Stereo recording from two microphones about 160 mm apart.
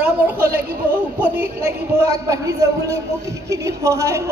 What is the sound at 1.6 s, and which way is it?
A woman's voice, 20° right (ahead or behind).